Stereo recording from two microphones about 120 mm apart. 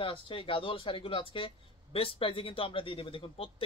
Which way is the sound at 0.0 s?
45° left (ahead or behind).